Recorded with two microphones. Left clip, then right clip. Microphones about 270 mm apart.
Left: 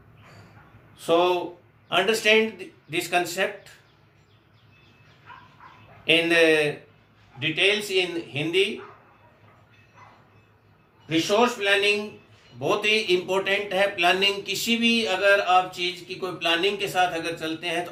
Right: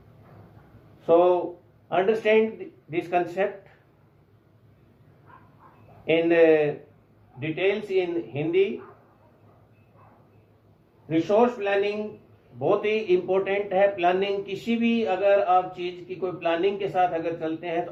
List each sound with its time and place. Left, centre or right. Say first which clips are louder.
1.0 s speech: right 2 dB; left
6.1 s speech: even; left
11.1 s speech: even; left